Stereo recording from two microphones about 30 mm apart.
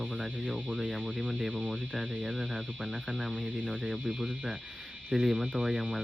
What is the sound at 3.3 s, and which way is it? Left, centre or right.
Speech, left.